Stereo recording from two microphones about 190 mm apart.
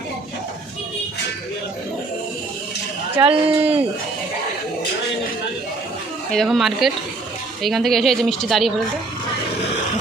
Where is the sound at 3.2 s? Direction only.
30° right (ahead or behind).